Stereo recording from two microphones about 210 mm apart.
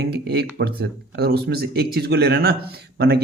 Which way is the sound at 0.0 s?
50° right (ahead or behind).